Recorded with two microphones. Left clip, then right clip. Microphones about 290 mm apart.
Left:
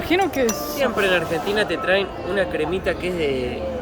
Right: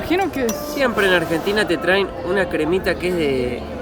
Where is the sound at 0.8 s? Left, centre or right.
Right.